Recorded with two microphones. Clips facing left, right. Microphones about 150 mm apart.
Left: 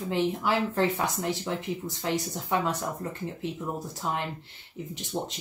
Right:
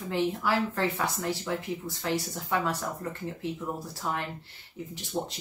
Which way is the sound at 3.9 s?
20° left (ahead or behind).